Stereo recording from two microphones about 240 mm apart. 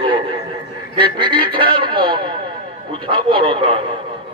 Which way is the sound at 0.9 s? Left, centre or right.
Centre.